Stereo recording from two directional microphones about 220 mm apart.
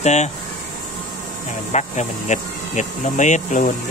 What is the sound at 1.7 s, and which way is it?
Speech, 30° left (ahead or behind).